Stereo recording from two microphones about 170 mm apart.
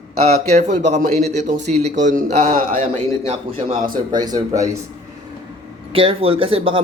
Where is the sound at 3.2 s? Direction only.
35° right (ahead or behind).